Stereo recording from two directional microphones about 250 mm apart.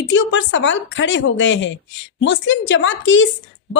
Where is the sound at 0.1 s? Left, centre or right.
Left.